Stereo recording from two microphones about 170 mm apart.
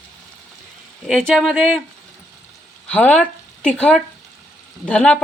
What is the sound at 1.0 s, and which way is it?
Speech, 5° left (ahead or behind).